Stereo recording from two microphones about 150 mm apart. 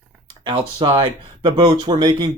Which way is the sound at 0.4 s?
35° right (ahead or behind).